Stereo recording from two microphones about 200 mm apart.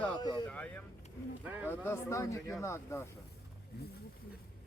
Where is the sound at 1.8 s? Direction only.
15° left (ahead or behind).